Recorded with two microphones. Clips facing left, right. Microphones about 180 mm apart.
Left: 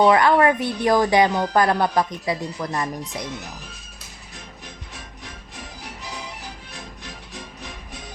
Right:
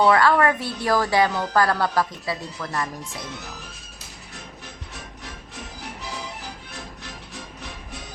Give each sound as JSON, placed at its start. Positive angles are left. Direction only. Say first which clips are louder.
{"t": 0.0, "sound": "a woman's voice", "louder": "left 2 dB", "side_deg": 20}